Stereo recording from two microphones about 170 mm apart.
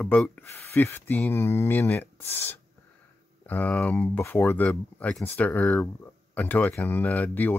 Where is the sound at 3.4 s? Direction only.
10° left (ahead or behind).